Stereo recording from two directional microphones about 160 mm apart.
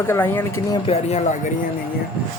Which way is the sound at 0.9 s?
45° left (ahead or behind).